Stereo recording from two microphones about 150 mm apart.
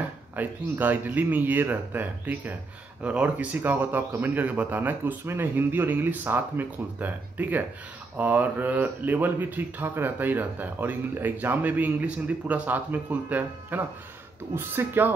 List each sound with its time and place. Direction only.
0.4 s speech: 10° right (ahead or behind)